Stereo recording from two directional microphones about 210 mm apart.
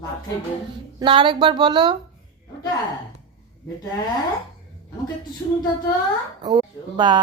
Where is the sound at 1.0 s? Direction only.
25° right (ahead or behind).